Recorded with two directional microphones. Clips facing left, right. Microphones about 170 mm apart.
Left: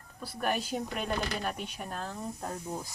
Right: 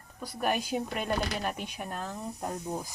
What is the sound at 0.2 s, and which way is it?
Speech, 10° right (ahead or behind).